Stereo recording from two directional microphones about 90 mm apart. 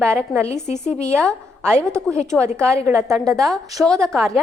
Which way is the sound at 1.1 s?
10° left (ahead or behind).